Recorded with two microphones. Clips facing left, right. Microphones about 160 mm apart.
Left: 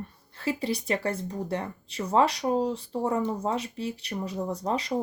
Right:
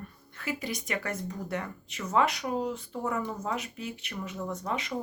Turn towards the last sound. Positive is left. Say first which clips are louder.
# left 5 dB
turn(degrees=35)  # may be behind; listen again after turning